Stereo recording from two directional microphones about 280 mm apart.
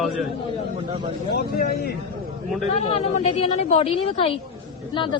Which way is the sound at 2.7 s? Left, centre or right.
Left.